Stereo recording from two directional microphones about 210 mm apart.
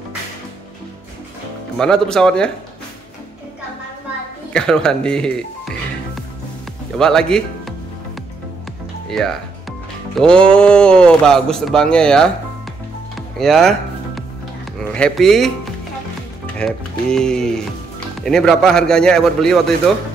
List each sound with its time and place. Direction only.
1.8 s a man's voice: 5° left (ahead or behind)
4.5 s music: 5° left (ahead or behind)
7.0 s a man's voice: 5° left (ahead or behind)
9.1 s speech: centre (ahead or behind)
13.4 s music: centre (ahead or behind)
14.8 s a man's voice: 5° left (ahead or behind)